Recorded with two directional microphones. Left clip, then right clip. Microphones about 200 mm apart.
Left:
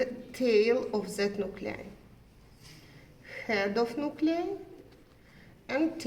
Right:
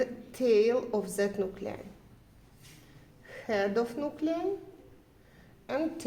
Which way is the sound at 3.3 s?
40° right (ahead or behind).